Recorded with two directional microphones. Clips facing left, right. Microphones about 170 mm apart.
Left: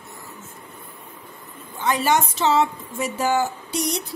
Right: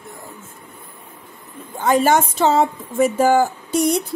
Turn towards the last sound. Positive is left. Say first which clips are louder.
# right 8 dB
turn(degrees=-50)  # may be behind; listen again after turning